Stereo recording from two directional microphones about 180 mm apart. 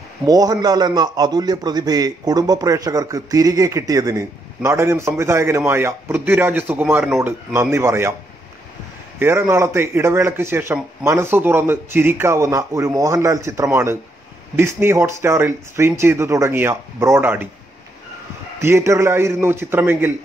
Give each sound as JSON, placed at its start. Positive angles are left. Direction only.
{"t": 0.3, "sound": "a man's voice", "side_deg": -20}
{"t": 9.2, "sound": "speech", "side_deg": -15}
{"t": 18.6, "sound": "speech", "side_deg": -15}